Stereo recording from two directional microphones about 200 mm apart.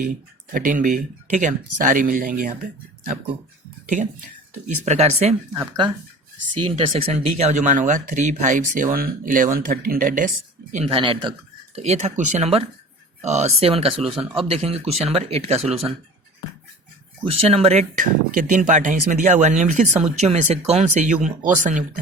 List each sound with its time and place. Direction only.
0.5 s speech: 40° right (ahead or behind)
3.8 s speech: 40° right (ahead or behind)
6.7 s speech: 30° right (ahead or behind)
10.7 s speech: 30° right (ahead or behind)
17.2 s speech: 30° right (ahead or behind)